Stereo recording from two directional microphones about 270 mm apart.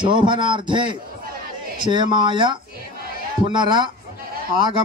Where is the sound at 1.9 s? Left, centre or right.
Centre.